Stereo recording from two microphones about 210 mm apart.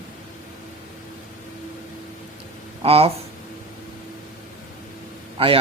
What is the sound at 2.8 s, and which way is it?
Speech, 30° right (ahead or behind).